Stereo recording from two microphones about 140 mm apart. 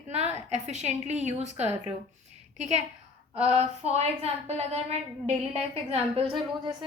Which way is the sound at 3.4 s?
50° right (ahead or behind).